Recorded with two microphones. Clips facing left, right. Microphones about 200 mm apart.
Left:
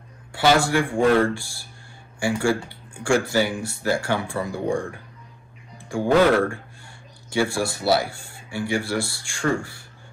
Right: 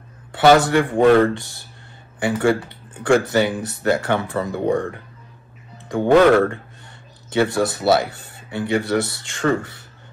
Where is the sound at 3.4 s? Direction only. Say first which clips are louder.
Right 4 dB; 20° right (ahead or behind).